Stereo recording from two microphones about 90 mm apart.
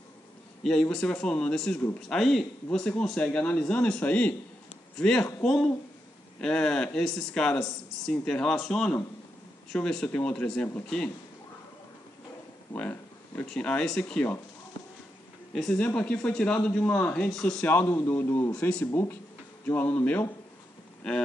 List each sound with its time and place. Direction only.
0.7 s speech: 10° left (ahead or behind)
13.4 s speech: 15° left (ahead or behind)
15.5 s speech: 10° left (ahead or behind)
17.3 s speech: 5° left (ahead or behind)
17.6 s a man's voice: 20° left (ahead or behind)